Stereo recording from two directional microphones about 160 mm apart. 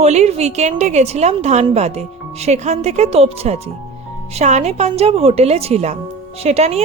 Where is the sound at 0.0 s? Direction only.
45° right (ahead or behind).